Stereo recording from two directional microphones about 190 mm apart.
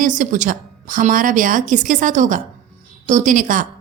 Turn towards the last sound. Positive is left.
turn(degrees=-45)  # may be behind; listen again after turning